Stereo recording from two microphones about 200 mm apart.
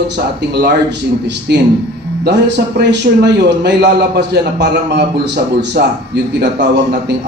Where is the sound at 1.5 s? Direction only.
55° right (ahead or behind).